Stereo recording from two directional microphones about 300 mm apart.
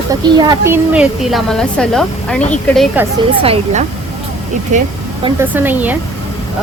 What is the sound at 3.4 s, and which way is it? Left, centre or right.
Speech, right.